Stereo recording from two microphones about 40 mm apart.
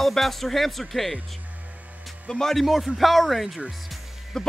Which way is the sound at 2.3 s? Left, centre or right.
Centre.